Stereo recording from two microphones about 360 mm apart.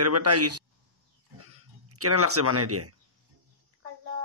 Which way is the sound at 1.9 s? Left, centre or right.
Right.